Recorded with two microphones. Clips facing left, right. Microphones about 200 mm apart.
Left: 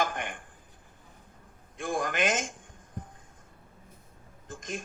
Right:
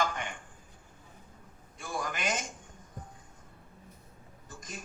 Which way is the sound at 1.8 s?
90° left.